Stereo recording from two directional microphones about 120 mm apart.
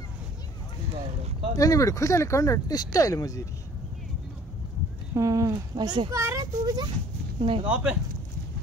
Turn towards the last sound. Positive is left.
turn(degrees=-10)  # may be behind; listen again after turning